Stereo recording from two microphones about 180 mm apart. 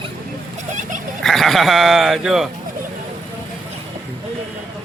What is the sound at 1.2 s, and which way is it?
Speech, centre (ahead or behind).